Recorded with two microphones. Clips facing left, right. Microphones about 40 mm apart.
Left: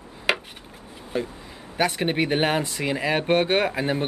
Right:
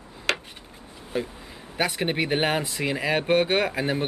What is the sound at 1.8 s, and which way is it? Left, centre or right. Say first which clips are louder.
Speech: left 2 dB; centre.